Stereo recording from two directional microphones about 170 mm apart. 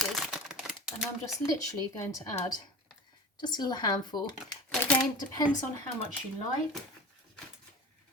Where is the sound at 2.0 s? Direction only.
20° left (ahead or behind).